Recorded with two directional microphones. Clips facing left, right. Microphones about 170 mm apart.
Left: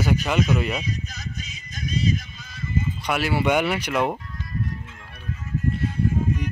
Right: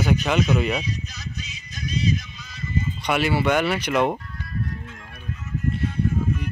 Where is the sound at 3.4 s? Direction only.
10° left (ahead or behind).